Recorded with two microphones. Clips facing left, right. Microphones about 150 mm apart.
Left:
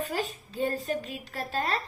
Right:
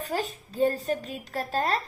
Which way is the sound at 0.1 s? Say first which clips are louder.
Right 2 dB; 40° right (ahead or behind).